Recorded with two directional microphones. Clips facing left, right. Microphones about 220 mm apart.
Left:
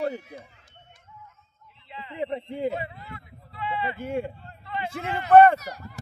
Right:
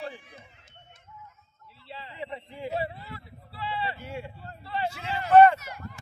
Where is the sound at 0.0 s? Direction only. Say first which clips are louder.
Left 10 dB; 40° left (ahead or behind).